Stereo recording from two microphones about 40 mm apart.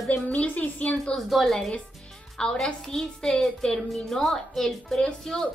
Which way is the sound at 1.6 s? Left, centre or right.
Centre.